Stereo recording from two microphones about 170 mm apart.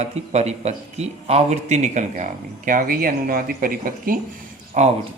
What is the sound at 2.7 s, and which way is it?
Speech, 55° right (ahead or behind).